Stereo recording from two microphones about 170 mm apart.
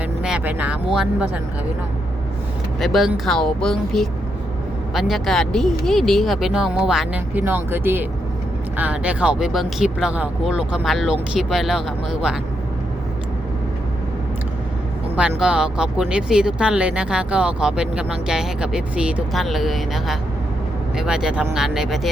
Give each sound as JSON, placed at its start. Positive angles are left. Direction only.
{"t": 0.2, "sound": "speech", "side_deg": -5}
{"t": 2.8, "sound": "speech", "side_deg": 0}
{"t": 15.1, "sound": "speech", "side_deg": -5}